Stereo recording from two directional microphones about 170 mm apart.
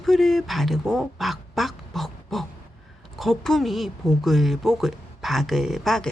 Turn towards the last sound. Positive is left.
turn(degrees=0)  # may be behind; listen again after turning